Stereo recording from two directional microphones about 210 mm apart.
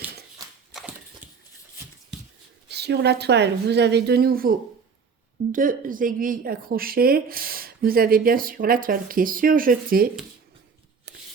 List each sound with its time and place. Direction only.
0.7 s horse: centre (ahead or behind)
1.2 s a sound: 10° right (ahead or behind)
2.6 s a woman's voice: 50° right (ahead or behind)